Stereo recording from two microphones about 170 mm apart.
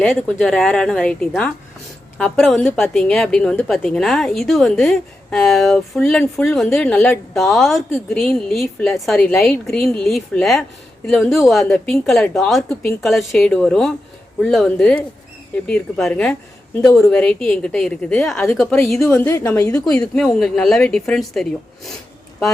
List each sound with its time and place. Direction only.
0.0 s a woman's voice: 5° left (ahead or behind)
7.3 s a woman's voice: centre (ahead or behind)
16.7 s a woman's voice: 20° left (ahead or behind)
17.1 s a woman's voice: 5° left (ahead or behind)
19.8 s a woman's voice: 5° left (ahead or behind)